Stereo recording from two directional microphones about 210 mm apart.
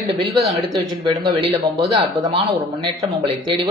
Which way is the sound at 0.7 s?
20° right (ahead or behind).